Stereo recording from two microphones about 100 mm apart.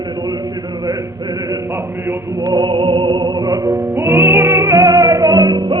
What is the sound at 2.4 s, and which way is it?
Music, 45° right (ahead or behind).